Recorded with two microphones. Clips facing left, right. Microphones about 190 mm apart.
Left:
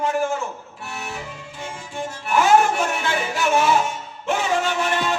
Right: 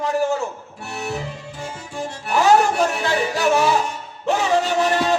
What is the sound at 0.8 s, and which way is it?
Music, 35° right (ahead or behind).